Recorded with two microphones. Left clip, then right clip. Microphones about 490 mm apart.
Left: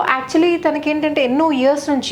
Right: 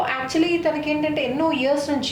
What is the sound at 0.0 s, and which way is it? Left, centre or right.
A woman's voice, left.